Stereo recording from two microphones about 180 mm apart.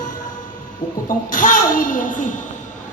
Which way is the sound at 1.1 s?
50° left (ahead or behind).